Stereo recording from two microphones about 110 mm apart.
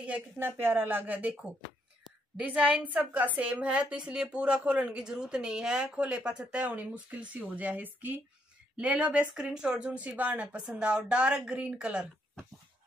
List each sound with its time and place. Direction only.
0.0 s a woman's voice: 15° right (ahead or behind)
2.4 s a woman's voice: 15° right (ahead or behind)